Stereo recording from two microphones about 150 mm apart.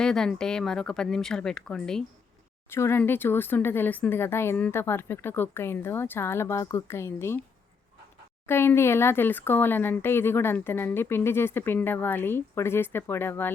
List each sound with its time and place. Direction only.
0.0 s speech: 5° left (ahead or behind)
2.6 s speech: 15° left (ahead or behind)
8.4 s speech: 15° left (ahead or behind)